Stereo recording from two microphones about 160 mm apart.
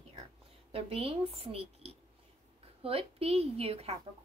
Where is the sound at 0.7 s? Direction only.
35° right (ahead or behind).